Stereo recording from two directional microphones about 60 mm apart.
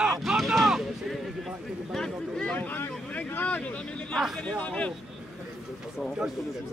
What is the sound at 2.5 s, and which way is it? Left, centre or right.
Speech, left.